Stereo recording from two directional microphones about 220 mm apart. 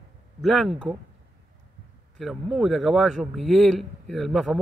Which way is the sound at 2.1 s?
Centre (ahead or behind).